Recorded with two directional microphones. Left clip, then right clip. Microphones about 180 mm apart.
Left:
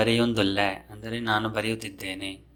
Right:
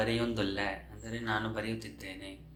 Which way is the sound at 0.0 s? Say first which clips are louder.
Left 9 dB; 45° left (ahead or behind).